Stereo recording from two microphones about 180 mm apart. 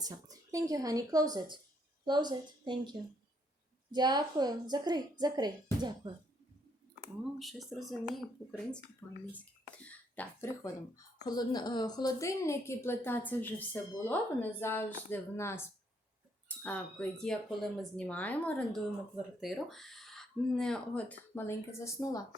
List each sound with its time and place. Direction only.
0.0 s speech: 20° right (ahead or behind)
3.9 s speech: 25° right (ahead or behind)
7.3 s speech: centre (ahead or behind)
9.3 s speech: 10° left (ahead or behind)